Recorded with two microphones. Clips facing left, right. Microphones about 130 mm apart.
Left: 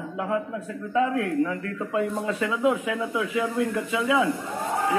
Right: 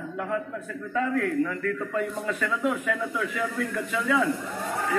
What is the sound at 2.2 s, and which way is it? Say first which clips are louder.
A man's voice: left 3 dB; 15° left (ahead or behind).